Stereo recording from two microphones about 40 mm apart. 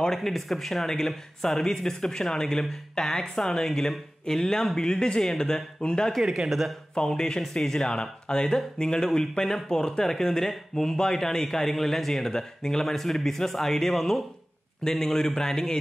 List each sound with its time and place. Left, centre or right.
0.0 s speech: centre
6.2 s speech: centre
7.0 s speech: centre